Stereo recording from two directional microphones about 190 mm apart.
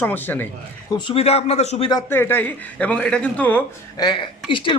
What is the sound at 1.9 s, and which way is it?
Speech, 15° left (ahead or behind).